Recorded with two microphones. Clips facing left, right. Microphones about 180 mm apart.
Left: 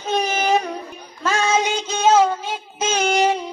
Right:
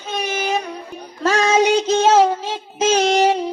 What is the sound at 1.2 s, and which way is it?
Child singing, 35° right (ahead or behind).